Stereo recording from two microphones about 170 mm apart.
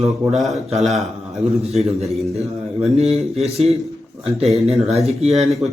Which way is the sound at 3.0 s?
40° right (ahead or behind).